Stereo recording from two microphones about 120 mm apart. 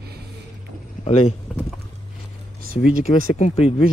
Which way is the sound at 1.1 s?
60° left (ahead or behind).